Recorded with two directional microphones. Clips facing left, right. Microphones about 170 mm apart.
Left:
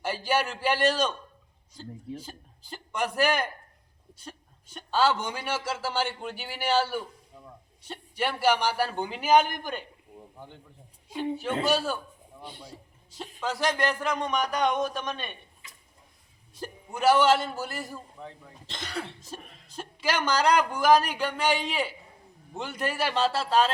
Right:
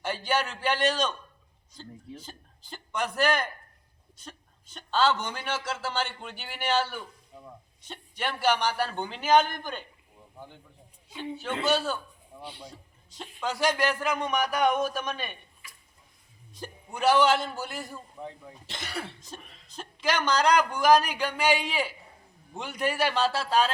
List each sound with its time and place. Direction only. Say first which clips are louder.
0.0 s a man's voice: left 1 dB; 10° left (ahead or behind)
2.2 s a man's voice: left 2 dB; 10° left (ahead or behind)
7.3 s a sound: right 6 dB; 5° right (ahead or behind)
7.9 s a man's voice: left 3 dB; 10° left (ahead or behind)
11.1 s a woman's voice: left 6 dB; 45° left (ahead or behind)
11.6 s a man's voice: right 2 dB; 10° left (ahead or behind)
16.6 s a man's voice: left 1 dB; 5° left (ahead or behind)
18.2 s speech: right 3 dB; 10° right (ahead or behind)
19.3 s a man's voice: left 3 dB; 5° left (ahead or behind)